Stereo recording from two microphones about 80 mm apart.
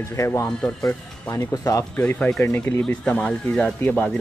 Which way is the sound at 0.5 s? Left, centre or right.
Centre.